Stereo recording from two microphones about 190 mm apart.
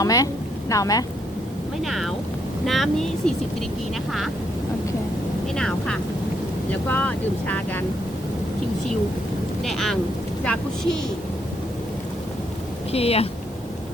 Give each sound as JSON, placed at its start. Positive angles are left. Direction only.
{"t": 0.0, "sound": "speech", "side_deg": 20}
{"t": 1.8, "sound": "speech", "side_deg": 0}
{"t": 5.5, "sound": "speech", "side_deg": 5}
{"t": 9.6, "sound": "speech", "side_deg": 0}
{"t": 12.9, "sound": "speech", "side_deg": 30}